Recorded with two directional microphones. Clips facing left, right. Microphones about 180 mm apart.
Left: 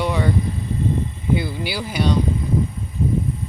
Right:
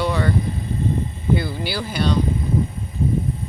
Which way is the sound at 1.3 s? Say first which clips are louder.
Right 1 dB; 15° left (ahead or behind).